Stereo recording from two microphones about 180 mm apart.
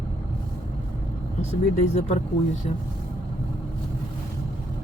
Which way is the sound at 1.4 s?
40° left (ahead or behind).